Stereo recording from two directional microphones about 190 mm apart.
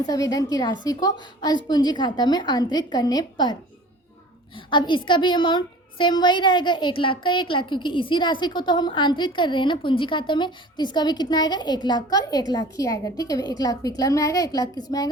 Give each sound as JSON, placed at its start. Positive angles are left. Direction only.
{"t": 0.0, "sound": "a woman's voice", "side_deg": 20}